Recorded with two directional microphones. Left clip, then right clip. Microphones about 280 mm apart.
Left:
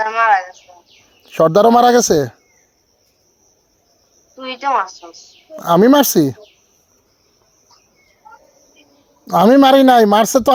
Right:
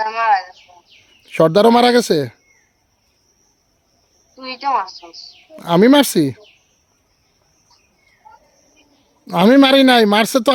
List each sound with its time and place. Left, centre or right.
0.0 s chicken: centre
1.3 s speech: centre
4.4 s speech: centre
5.1 s a woman's voice: centre
5.6 s speech: centre
9.2 s speech: centre